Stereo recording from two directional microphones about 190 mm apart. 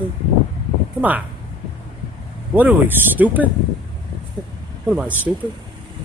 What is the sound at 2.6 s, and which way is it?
Speech, 10° right (ahead or behind).